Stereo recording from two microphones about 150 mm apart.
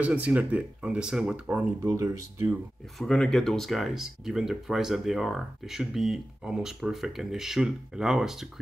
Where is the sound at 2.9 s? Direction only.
5° left (ahead or behind).